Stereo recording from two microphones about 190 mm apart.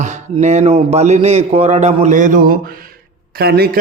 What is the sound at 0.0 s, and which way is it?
A man's voice, 40° right (ahead or behind).